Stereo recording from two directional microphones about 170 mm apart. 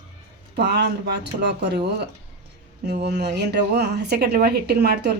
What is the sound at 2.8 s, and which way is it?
A woman's voice, 75° right (ahead or behind).